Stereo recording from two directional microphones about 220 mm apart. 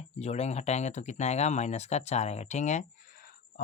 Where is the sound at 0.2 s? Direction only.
30° left (ahead or behind).